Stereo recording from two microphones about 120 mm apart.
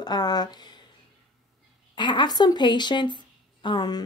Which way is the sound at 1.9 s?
40° left (ahead or behind).